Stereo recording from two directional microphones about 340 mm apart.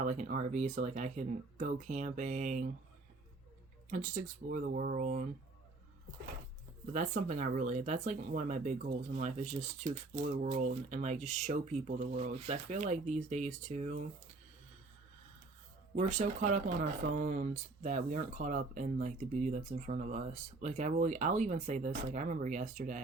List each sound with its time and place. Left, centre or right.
0.0 s speech: right
3.8 s speech: right
6.9 s speech: right
16.0 s speech: right